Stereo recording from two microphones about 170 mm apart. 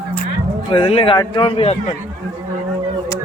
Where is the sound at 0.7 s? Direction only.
35° left (ahead or behind).